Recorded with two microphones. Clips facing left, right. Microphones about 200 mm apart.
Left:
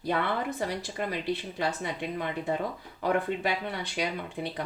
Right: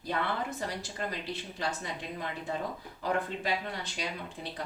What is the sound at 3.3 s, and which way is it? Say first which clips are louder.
Speech: left 6 dB; 15° left (ahead or behind).